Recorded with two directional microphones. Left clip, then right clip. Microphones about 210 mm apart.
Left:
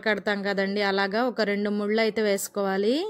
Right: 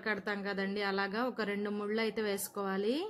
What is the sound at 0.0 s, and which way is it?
Speech, 30° left (ahead or behind).